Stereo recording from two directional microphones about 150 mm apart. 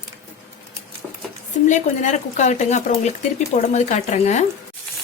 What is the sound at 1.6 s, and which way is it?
Speech, 55° left (ahead or behind).